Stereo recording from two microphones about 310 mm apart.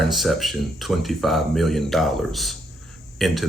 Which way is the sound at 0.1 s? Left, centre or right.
Centre.